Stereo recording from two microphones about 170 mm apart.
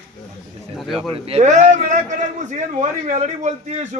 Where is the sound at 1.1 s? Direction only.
35° right (ahead or behind).